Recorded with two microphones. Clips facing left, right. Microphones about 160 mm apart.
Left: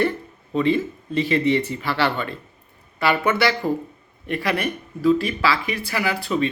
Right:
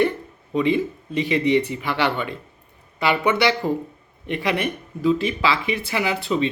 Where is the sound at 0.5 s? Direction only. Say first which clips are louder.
Even; 15° right (ahead or behind).